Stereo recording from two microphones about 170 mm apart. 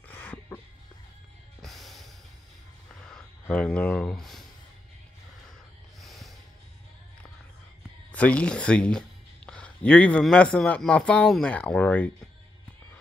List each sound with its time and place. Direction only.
0.1 s music: 10° left (ahead or behind)
1.6 s music: centre (ahead or behind)
3.0 s a sound: 5° left (ahead or behind)
5.9 s snort: centre (ahead or behind)
8.1 s a man's voice: 10° left (ahead or behind)